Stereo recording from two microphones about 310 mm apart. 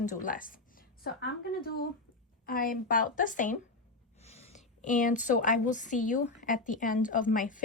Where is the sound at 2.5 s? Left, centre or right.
Left.